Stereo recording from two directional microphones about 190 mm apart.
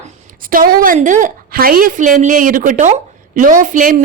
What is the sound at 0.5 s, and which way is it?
A woman's voice, 50° right (ahead or behind).